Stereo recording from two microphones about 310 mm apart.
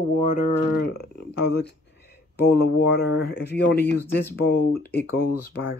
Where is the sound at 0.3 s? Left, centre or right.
Left.